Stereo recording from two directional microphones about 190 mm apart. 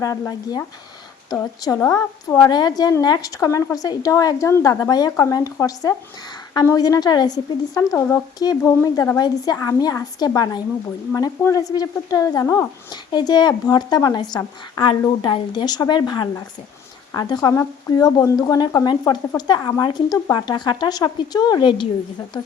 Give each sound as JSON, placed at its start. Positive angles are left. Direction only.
{"t": 0.0, "sound": "speech", "side_deg": 20}